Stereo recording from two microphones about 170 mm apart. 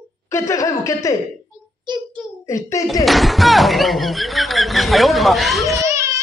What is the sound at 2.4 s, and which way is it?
Speech, 20° left (ahead or behind).